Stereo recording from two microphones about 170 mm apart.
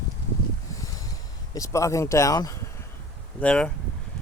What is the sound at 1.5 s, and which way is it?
Speech, 20° left (ahead or behind).